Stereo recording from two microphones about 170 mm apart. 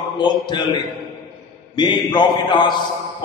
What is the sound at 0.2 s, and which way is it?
Mantra, 25° left (ahead or behind).